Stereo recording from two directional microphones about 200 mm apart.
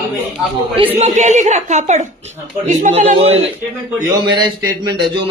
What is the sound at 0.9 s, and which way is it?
A man's voice, 35° right (ahead or behind).